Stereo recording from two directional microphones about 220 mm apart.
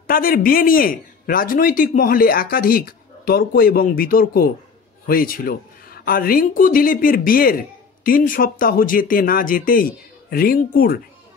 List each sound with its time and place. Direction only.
0.0 s speech: 40° left (ahead or behind)